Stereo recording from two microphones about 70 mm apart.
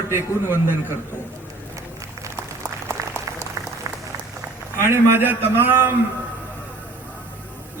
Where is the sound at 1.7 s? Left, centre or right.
Right.